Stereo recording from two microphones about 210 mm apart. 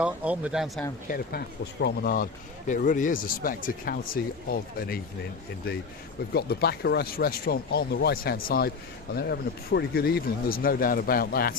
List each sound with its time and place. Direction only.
0.0 s speech: 5° right (ahead or behind)
1.0 s speech: 45° left (ahead or behind)
6.3 s speech: 50° left (ahead or behind)